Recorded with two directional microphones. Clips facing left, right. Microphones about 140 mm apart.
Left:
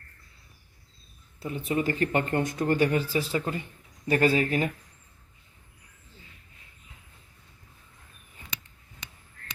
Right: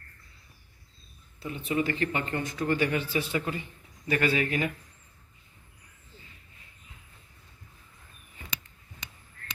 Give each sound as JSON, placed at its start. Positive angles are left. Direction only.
{"t": 1.4, "sound": "speech", "side_deg": 40}